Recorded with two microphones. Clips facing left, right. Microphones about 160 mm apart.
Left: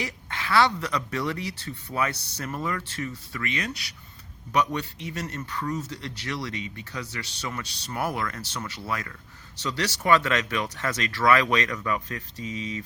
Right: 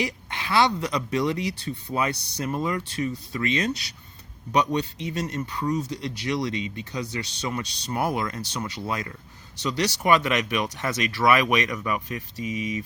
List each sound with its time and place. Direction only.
0.0 s speech: 20° right (ahead or behind)